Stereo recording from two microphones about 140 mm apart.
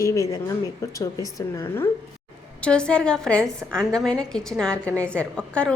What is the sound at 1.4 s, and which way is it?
Speech, 20° left (ahead or behind).